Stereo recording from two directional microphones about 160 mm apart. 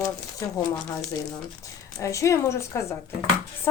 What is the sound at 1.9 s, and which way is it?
A woman's voice, 20° left (ahead or behind).